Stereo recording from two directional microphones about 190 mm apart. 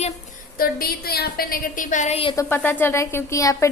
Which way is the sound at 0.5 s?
50° left (ahead or behind).